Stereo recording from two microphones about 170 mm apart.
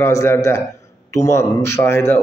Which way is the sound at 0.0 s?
15° left (ahead or behind).